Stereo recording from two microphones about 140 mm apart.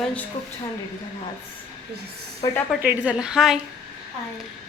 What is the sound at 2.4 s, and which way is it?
Speech, 30° left (ahead or behind).